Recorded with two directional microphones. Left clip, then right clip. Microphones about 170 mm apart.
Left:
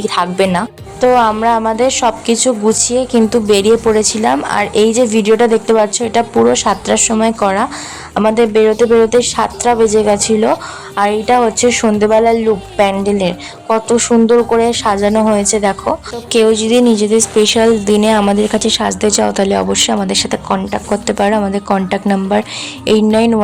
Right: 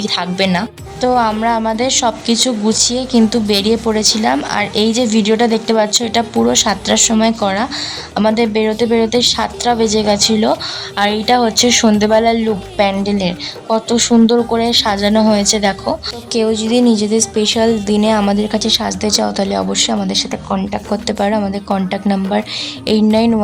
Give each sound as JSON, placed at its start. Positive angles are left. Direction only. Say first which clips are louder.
{"t": 0.0, "sound": "a woman's voice", "louder": "left 3 dB", "side_deg": 20}